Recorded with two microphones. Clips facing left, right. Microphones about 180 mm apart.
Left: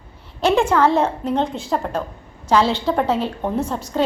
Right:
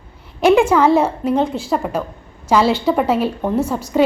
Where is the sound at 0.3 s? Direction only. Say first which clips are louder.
Right 4 dB; 10° right (ahead or behind).